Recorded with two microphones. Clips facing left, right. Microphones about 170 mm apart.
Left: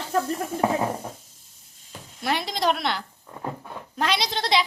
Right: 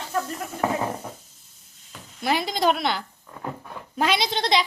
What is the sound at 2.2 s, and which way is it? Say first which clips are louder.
A woman's voice: right 2 dB; centre (ahead or behind).